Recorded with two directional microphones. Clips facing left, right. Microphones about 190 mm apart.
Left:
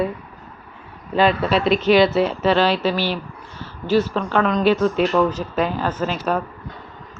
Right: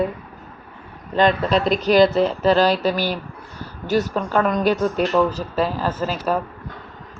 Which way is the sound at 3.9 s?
45° right (ahead or behind).